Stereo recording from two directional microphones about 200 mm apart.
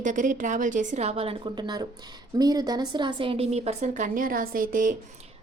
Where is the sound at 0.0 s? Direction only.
40° right (ahead or behind).